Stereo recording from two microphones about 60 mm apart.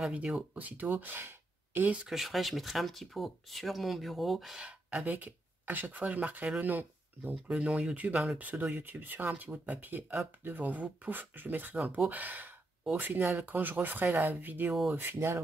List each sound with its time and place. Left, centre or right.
0.1 s speech: right
2.0 s speech: centre
4.6 s speech: centre
7.4 s speech: centre; by 14.7 s right
14.7 s speech: centre
15.0 s speech: right